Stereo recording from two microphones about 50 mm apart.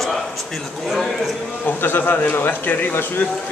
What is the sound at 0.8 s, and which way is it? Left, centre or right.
Speech, centre.